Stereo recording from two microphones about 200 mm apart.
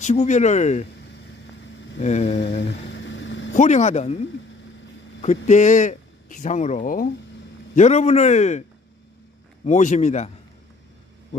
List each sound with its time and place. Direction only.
0.0 s a man's voice: 35° left (ahead or behind)
2.0 s a man's voice: 35° left (ahead or behind)
2.9 s vehicle: 65° left (ahead or behind)
3.5 s a man's voice: 35° left (ahead or behind)
5.2 s a man's voice: 35° left (ahead or behind)
9.7 s a man's voice: 35° left (ahead or behind)